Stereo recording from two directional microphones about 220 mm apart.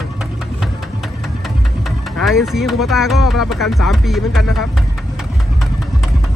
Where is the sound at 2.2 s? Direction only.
Centre (ahead or behind).